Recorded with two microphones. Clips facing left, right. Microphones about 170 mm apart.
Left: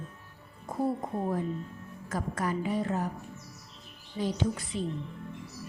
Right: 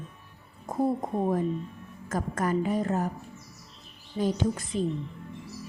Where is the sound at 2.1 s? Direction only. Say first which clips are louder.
Right 4 dB; 45° right (ahead or behind).